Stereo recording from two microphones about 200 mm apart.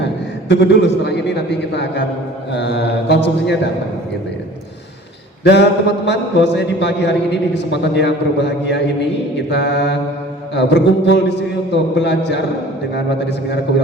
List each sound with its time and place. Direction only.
0.4 s a man's voice: 60° left (ahead or behind)
5.4 s a sound: 60° left (ahead or behind)
6.1 s a man's voice: 60° left (ahead or behind)